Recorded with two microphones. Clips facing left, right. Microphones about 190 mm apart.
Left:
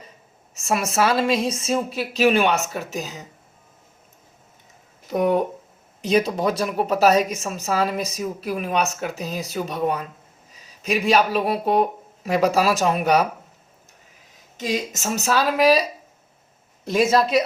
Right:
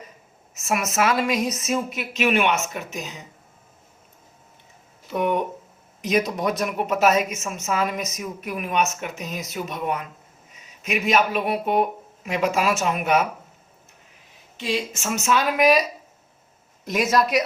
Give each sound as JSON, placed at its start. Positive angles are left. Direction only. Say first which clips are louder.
{"t": 0.5, "sound": "speech", "louder": "left 2 dB", "side_deg": 30}
{"t": 5.0, "sound": "speech", "louder": "left 3 dB", "side_deg": 40}
{"t": 14.6, "sound": "speech", "louder": "left 1 dB", "side_deg": 40}